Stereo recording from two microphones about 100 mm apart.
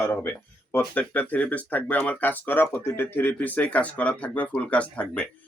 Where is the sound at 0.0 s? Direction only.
20° left (ahead or behind).